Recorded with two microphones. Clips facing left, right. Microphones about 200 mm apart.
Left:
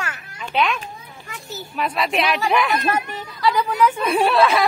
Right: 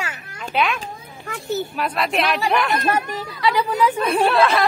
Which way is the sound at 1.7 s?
Centre (ahead or behind).